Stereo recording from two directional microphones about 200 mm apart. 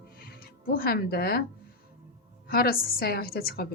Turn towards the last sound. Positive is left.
turn(degrees=50)  # may be behind; listen again after turning